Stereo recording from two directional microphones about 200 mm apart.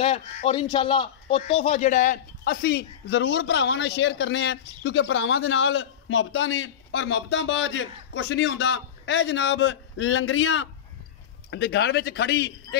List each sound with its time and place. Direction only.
0.0 s a man's voice: 30° left (ahead or behind); by 12.5 s 55° left (ahead or behind)